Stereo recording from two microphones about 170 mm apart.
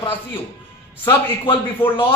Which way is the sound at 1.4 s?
30° left (ahead or behind).